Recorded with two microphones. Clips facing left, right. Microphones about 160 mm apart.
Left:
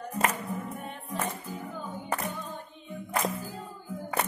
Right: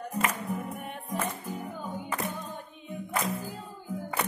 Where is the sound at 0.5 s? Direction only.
15° right (ahead or behind).